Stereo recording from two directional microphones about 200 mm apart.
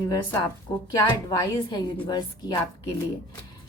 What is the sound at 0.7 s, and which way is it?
A woman's voice, 20° left (ahead or behind).